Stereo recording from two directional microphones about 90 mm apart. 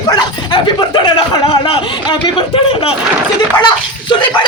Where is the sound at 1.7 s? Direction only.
70° left (ahead or behind).